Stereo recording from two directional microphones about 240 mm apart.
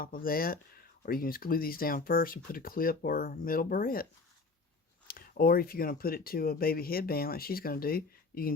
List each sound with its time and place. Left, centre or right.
0.0 s speech: left
5.0 s speech: left